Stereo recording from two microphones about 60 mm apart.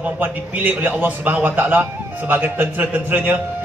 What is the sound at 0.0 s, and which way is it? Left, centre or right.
A man's voice, right.